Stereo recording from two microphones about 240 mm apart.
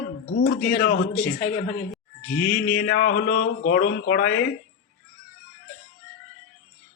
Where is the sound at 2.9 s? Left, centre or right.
Left.